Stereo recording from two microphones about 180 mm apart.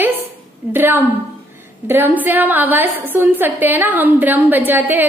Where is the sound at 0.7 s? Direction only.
10° right (ahead or behind).